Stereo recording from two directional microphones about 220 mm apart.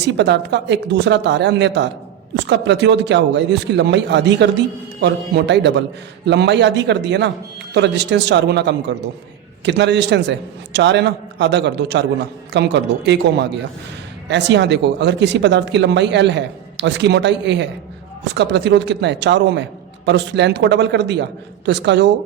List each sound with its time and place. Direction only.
0.0 s a man's voice: 50° right (ahead or behind)